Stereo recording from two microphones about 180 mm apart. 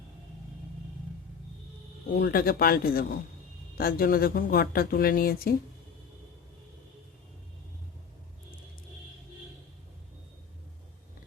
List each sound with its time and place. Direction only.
2.1 s speech: 55° left (ahead or behind)